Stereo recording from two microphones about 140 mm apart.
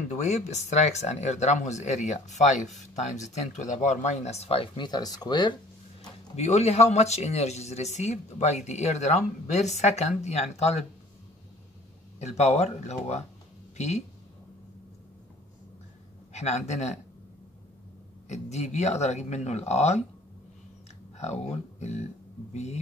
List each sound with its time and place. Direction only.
0.1 s a man's voice: 55° left (ahead or behind); by 5.6 s 30° left (ahead or behind)
6.3 s a man's voice: 50° left (ahead or behind)
12.2 s a man's voice: 50° left (ahead or behind)
16.3 s a man's voice: 55° left (ahead or behind)
18.3 s a man's voice: 55° left (ahead or behind)
21.2 s a man's voice: 50° left (ahead or behind)